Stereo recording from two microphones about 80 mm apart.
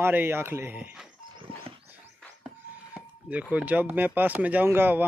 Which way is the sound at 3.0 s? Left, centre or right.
Centre.